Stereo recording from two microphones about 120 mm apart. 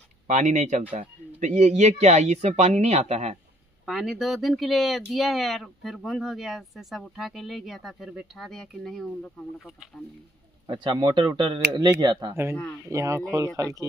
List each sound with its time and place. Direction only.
0.3 s speech: 90° right; by 3.3 s 65° right (ahead or behind)
3.8 s speech: centre (ahead or behind)
10.7 s speech: 40° right (ahead or behind)
12.8 s speech: 25° right (ahead or behind)